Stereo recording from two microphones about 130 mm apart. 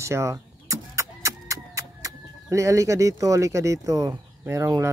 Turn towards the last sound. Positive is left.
turn(degrees=-20)  # may be behind; listen again after turning